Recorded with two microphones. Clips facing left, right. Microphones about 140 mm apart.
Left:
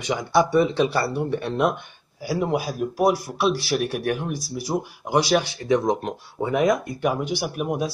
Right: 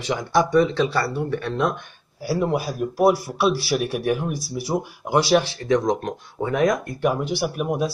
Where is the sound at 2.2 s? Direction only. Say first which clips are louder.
Right 1 dB; centre (ahead or behind).